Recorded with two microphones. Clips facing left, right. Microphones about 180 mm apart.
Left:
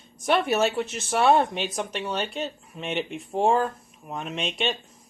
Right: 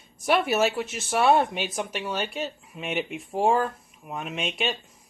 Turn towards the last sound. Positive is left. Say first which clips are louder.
# left 1 dB
turn(degrees=0)  # may be behind; listen again after turning